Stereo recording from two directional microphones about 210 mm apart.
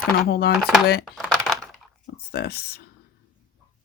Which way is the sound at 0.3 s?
45° left (ahead or behind).